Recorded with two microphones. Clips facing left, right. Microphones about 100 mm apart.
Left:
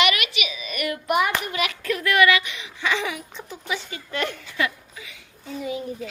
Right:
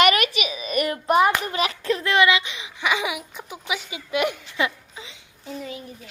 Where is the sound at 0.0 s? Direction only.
40° right (ahead or behind).